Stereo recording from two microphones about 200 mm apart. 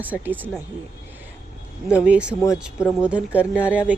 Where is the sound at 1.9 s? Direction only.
5° right (ahead or behind).